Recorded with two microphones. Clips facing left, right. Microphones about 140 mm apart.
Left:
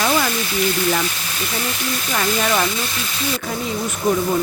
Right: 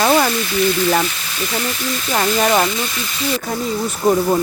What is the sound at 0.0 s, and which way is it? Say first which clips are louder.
Sizzle: right 5 dB; 45° right (ahead or behind).